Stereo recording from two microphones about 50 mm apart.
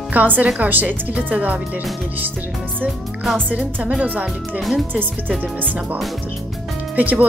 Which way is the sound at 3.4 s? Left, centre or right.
Right.